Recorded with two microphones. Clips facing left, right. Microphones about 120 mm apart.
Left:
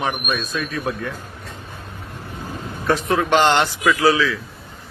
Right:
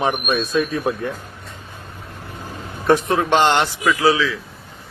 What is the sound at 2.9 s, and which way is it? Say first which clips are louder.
A man's voice: right 2 dB; 25° right (ahead or behind).